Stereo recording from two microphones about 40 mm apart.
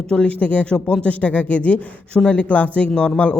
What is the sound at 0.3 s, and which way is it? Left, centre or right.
Speech, left.